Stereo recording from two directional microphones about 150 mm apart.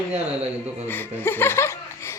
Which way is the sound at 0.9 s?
15° left (ahead or behind).